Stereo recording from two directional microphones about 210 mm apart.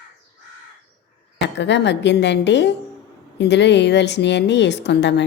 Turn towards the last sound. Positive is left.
turn(degrees=55)  # may be behind; listen again after turning